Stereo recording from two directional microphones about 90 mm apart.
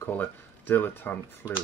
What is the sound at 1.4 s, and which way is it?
Speech, 20° right (ahead or behind).